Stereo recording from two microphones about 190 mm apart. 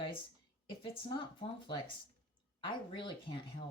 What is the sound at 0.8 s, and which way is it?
Speech, 25° left (ahead or behind).